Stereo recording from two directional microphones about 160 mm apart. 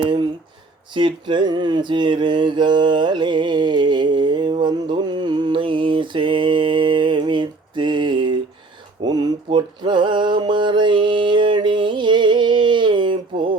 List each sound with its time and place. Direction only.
0.0 s speech: 30° right (ahead or behind)
0.9 s mantra: 30° right (ahead or behind)